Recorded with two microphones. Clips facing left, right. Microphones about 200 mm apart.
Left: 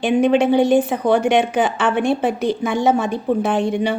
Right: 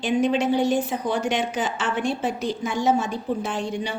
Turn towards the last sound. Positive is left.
turn(degrees=60)  # may be behind; listen again after turning